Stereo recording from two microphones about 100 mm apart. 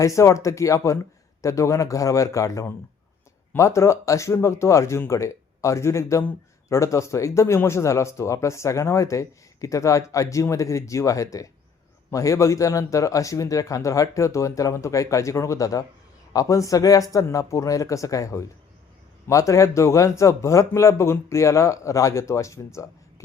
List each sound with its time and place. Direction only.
0.0 s a man's voice: 30° left (ahead or behind)